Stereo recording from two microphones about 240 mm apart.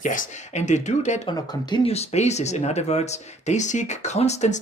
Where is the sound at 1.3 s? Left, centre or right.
Centre.